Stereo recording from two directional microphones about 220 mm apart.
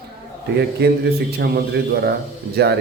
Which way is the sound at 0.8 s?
45° right (ahead or behind).